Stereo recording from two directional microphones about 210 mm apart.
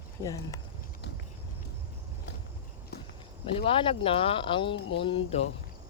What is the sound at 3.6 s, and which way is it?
Speech, 25° left (ahead or behind).